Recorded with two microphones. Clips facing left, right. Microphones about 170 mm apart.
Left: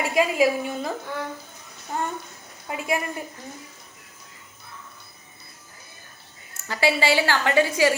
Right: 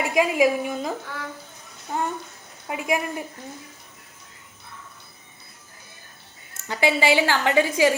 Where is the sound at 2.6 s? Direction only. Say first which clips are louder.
Right 1 dB; 15° right (ahead or behind).